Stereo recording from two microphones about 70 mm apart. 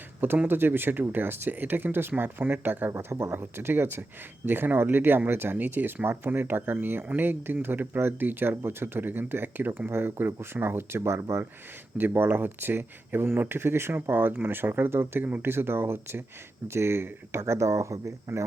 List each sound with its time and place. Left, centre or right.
0.4 s speech: right
2.9 s speech: right